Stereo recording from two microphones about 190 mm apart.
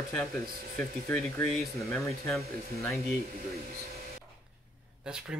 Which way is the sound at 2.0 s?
Centre (ahead or behind).